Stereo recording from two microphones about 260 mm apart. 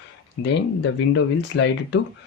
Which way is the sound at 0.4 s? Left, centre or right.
Left.